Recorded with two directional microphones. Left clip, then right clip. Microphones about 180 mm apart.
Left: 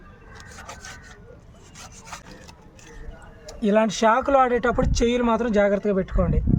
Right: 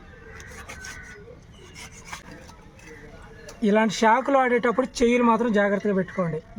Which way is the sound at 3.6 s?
15° left (ahead or behind).